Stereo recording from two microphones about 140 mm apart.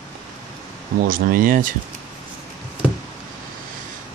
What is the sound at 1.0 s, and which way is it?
Speech, 90° right.